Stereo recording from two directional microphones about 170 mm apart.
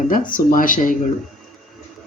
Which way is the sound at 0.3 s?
55° left (ahead or behind).